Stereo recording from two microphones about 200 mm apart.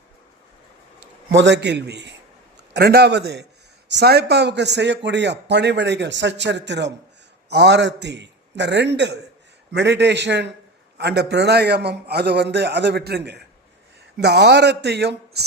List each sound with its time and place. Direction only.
1.3 s a man's voice: 65° right (ahead or behind)